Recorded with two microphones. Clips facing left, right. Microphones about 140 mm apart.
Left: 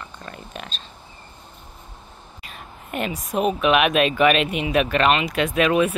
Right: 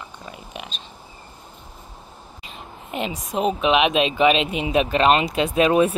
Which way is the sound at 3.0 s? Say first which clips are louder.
Left 1 dB; 25° right (ahead or behind).